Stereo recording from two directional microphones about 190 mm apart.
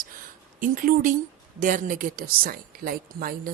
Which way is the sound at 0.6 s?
45° right (ahead or behind).